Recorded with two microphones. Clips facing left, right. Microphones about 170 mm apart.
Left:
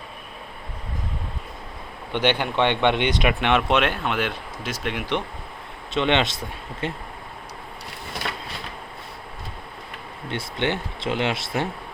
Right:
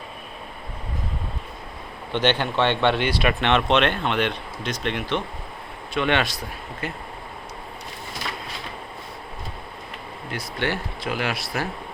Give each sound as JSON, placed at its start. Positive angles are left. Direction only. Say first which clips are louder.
{"t": 2.1, "sound": "speech", "louder": "even", "side_deg": 10}
{"t": 5.9, "sound": "speech", "louder": "left 1 dB", "side_deg": 20}
{"t": 10.2, "sound": "speech", "louder": "left 2 dB", "side_deg": 25}